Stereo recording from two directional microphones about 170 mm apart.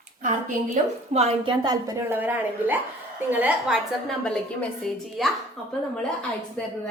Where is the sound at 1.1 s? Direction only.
35° right (ahead or behind); by 5.2 s 5° left (ahead or behind).